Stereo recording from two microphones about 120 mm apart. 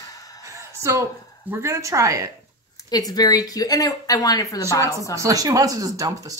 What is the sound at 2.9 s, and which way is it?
Speech, 35° left (ahead or behind).